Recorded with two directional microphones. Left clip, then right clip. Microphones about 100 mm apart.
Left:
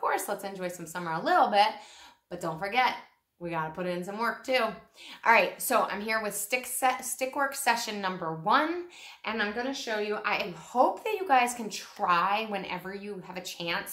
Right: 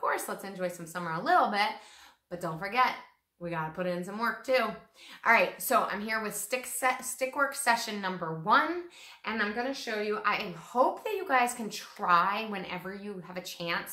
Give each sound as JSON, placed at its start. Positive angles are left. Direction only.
{"t": 0.0, "sound": "a woman's voice", "side_deg": 30}